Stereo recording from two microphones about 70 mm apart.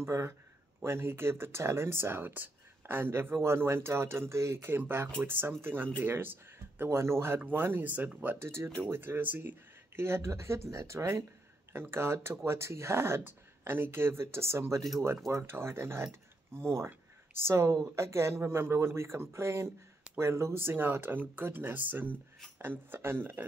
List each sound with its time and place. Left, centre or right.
0.0 s speech: right